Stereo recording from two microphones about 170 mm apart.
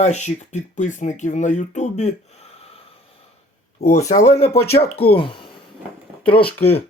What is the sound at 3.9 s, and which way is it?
Speech, 40° left (ahead or behind).